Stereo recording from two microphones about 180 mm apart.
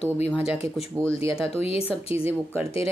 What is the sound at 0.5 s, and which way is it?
Speech, 35° left (ahead or behind).